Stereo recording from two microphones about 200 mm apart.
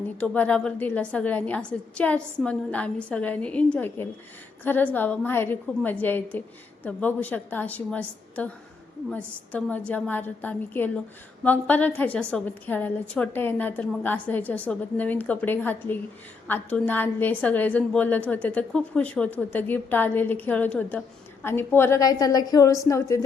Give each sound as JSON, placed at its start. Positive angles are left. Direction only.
{"t": 0.2, "sound": "a woman's voice", "side_deg": 5}